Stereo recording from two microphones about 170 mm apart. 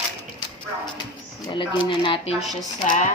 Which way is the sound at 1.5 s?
30° left (ahead or behind).